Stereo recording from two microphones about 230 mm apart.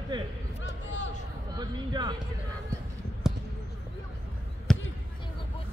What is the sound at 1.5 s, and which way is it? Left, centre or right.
Speech, centre.